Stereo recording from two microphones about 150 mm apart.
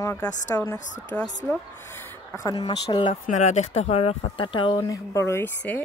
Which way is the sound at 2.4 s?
25° left (ahead or behind).